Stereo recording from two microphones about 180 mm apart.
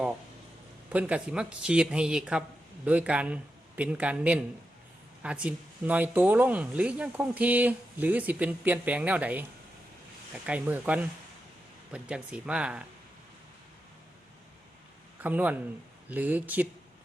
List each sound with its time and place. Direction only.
0.9 s speech: 10° right (ahead or behind)
15.2 s speech: 10° right (ahead or behind)